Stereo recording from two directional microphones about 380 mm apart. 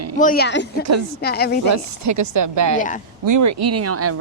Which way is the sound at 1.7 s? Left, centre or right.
Right.